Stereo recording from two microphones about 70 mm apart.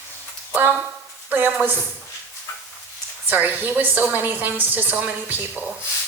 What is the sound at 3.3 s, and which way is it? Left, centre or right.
A woman's voice, right.